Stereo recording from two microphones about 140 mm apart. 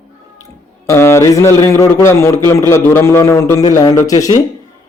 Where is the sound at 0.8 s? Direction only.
20° left (ahead or behind).